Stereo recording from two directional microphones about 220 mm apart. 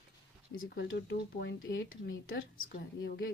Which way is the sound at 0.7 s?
50° left (ahead or behind).